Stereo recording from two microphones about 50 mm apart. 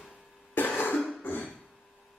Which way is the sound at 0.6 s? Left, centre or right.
Left.